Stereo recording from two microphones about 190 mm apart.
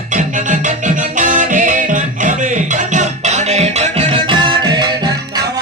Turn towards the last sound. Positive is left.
turn(degrees=-20)  # may be behind; listen again after turning